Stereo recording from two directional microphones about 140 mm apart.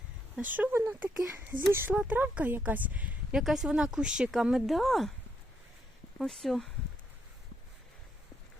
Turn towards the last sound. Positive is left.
turn(degrees=0)  # may be behind; listen again after turning